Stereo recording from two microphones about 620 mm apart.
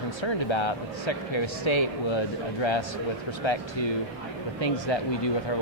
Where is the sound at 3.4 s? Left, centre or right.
Left.